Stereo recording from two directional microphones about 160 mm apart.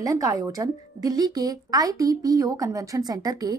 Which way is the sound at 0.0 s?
20° right (ahead or behind).